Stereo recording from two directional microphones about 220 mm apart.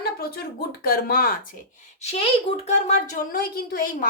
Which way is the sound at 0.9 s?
40° left (ahead or behind).